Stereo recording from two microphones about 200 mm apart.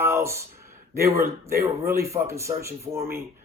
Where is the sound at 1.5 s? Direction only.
15° right (ahead or behind).